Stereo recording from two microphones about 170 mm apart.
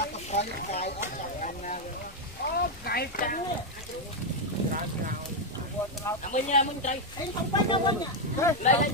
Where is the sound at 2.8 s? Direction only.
65° left (ahead or behind).